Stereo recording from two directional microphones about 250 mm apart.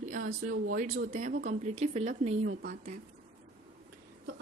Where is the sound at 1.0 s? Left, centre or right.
Right.